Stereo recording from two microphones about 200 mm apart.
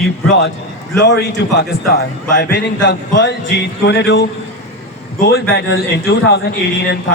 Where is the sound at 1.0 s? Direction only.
55° left (ahead or behind).